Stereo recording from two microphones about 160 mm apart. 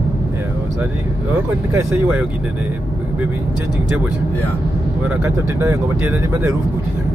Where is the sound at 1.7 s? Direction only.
15° right (ahead or behind).